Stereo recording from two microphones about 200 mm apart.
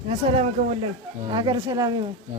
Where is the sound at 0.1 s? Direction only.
35° right (ahead or behind).